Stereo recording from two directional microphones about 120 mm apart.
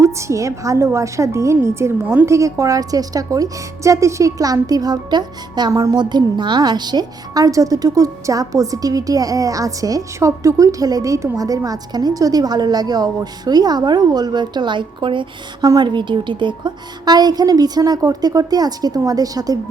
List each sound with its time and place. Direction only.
0.0 s a woman's voice: 25° right (ahead or behind)